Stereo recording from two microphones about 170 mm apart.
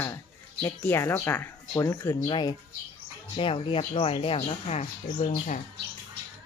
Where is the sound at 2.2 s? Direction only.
30° left (ahead or behind).